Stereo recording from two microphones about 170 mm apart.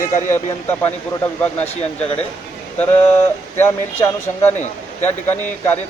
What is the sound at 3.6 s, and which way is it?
Speech, 15° left (ahead or behind).